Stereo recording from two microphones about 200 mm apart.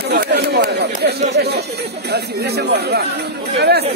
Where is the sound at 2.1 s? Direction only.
55° right (ahead or behind).